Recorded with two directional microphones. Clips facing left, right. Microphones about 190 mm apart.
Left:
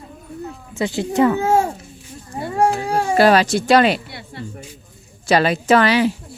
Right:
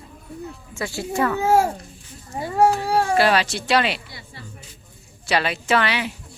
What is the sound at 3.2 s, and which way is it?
Speech, 45° left (ahead or behind).